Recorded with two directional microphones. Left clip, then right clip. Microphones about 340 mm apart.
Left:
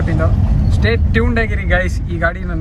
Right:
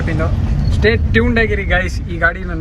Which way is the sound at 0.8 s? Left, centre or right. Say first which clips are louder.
Right 4 dB; centre.